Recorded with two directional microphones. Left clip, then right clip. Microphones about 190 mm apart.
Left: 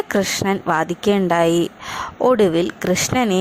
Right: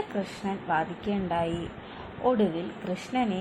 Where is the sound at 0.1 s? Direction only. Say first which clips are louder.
Left 14 dB; 50° left (ahead or behind).